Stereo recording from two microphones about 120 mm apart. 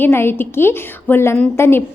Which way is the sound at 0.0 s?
20° left (ahead or behind).